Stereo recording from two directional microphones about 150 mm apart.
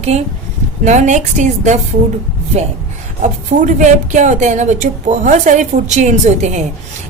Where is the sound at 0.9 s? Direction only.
55° right (ahead or behind).